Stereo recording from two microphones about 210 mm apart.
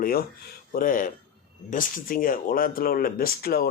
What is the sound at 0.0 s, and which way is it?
Speech, 45° left (ahead or behind).